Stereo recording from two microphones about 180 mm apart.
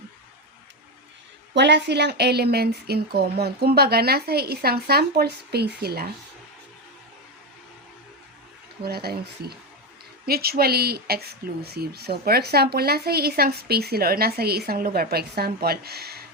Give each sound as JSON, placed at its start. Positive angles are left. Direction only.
{"t": 1.5, "sound": "speech", "side_deg": -70}
{"t": 8.8, "sound": "speech", "side_deg": -60}